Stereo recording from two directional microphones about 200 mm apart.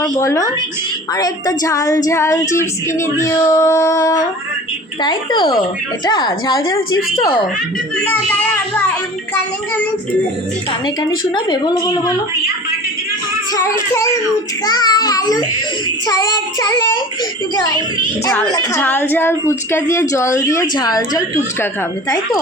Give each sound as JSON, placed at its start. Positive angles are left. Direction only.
{"t": 0.1, "sound": "a woman's voice", "side_deg": 15}
{"t": 7.9, "sound": "speech", "side_deg": 10}
{"t": 11.3, "sound": "a woman's voice", "side_deg": 20}
{"t": 13.5, "sound": "a woman's voice", "side_deg": 15}
{"t": 17.7, "sound": "a woman's voice", "side_deg": -25}
{"t": 18.3, "sound": "a woman's voice", "side_deg": 15}